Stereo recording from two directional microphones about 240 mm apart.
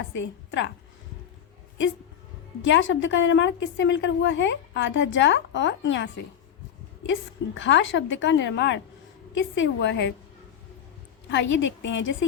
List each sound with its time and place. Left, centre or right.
0.1 s a woman's voice: left
2.6 s a woman's voice: left
7.1 s a woman's voice: left
11.3 s a woman's voice: left